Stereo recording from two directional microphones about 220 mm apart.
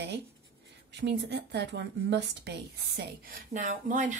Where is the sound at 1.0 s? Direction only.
50° right (ahead or behind).